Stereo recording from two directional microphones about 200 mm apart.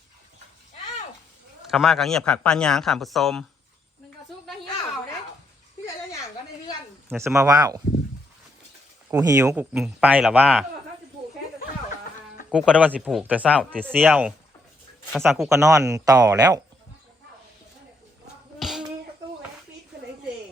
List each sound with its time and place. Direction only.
1.6 s a man's voice: centre (ahead or behind)
7.1 s speech: 15° right (ahead or behind)
9.1 s a man's voice: 15° right (ahead or behind); by 10.7 s centre (ahead or behind)
12.5 s a man's voice: 5° right (ahead or behind)
13.6 s a man's voice: 5° left (ahead or behind)
15.5 s speech: 15° right (ahead or behind)
18.6 s hands: centre (ahead or behind)